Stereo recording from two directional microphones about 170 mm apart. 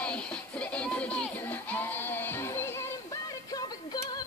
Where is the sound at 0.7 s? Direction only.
5° left (ahead or behind).